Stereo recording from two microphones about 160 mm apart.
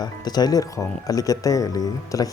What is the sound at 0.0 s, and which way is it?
Speech, 25° left (ahead or behind).